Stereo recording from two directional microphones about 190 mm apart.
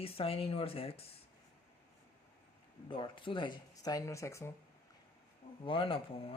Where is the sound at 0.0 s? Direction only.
30° left (ahead or behind).